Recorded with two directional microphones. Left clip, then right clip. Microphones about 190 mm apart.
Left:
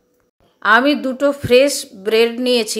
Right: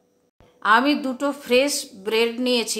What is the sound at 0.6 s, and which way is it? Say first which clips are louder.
A woman's voice: left 5 dB; 20° left (ahead or behind).